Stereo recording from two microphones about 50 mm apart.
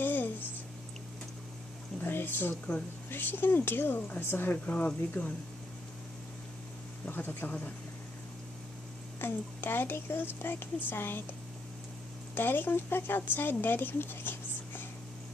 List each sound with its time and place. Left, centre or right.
0.0 s a sound: left
2.0 s a sound: left
3.1 s a woman's voice: left
4.6 s speech: left
7.1 s a woman's voice: left
9.2 s a woman's voice: left
12.4 s speech: left